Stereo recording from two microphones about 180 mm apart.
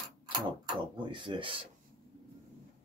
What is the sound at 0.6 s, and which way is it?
Speech, 25° right (ahead or behind).